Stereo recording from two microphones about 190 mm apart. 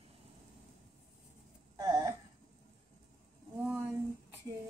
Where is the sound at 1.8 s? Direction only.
20° right (ahead or behind).